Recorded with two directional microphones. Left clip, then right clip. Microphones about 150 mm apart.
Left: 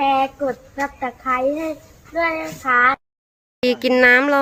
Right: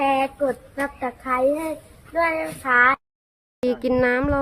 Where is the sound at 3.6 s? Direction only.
5° right (ahead or behind).